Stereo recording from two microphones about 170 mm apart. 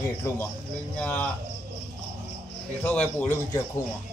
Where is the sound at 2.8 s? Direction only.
10° left (ahead or behind).